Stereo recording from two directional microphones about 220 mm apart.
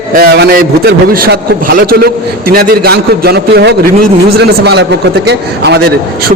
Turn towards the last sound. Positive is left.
turn(degrees=-45)  # may be behind; listen again after turning